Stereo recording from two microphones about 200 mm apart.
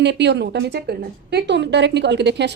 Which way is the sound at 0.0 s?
60° right (ahead or behind).